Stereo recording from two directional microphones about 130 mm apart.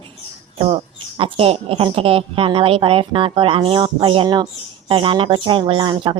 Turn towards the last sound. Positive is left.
turn(degrees=-35)  # may be behind; listen again after turning